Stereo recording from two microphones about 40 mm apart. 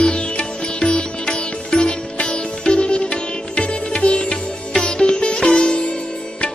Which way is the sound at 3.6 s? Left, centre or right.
Left.